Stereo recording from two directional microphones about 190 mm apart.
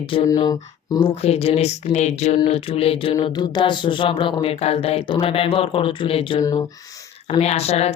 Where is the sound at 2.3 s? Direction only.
30° left (ahead or behind).